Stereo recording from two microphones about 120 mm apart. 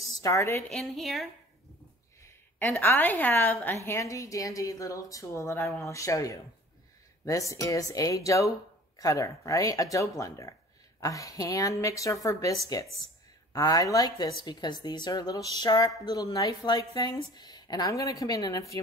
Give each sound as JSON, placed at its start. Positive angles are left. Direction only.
{"t": 0.0, "sound": "a woman's voice", "side_deg": 30}
{"t": 0.7, "sound": "speech", "side_deg": 0}
{"t": 2.6, "sound": "a woman's voice", "side_deg": 15}